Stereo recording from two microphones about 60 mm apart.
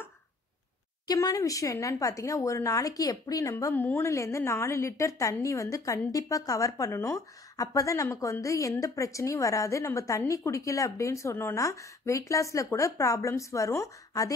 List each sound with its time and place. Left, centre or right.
1.0 s speech: left
3.9 s a woman's voice: left